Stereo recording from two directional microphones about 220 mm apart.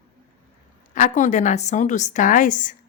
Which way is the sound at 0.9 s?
35° left (ahead or behind).